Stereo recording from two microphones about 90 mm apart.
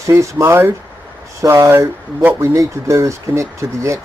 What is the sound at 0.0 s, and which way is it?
Speech, 35° right (ahead or behind).